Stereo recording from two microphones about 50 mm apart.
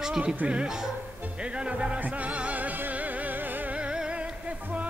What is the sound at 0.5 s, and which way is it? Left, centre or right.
Speech, centre.